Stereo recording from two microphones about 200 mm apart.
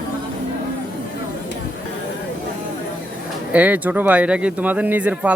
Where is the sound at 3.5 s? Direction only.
10° right (ahead or behind).